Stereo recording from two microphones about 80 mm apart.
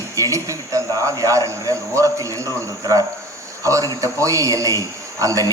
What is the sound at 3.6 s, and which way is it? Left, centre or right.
A man's voice, right.